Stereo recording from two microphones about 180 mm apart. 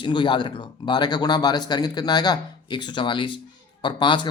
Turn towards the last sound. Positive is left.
turn(degrees=25)  # may be behind; listen again after turning